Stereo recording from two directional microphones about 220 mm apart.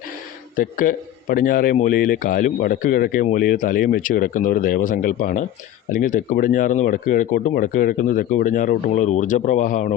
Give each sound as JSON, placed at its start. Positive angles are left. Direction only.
{"t": 0.5, "sound": "a man's voice", "side_deg": 40}